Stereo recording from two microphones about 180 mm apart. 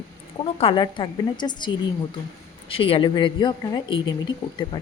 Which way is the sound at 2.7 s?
30° left (ahead or behind).